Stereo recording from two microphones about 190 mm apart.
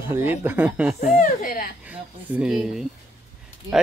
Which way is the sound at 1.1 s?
45° left (ahead or behind).